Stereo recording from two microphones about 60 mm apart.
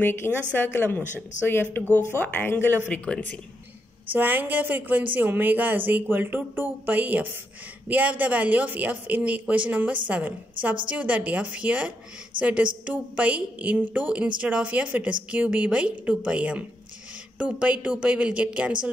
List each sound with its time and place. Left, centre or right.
0.0 s speech: left
2.9 s speech: left
4.1 s a woman's voice: right